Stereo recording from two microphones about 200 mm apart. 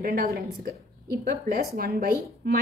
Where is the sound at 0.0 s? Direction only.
50° right (ahead or behind).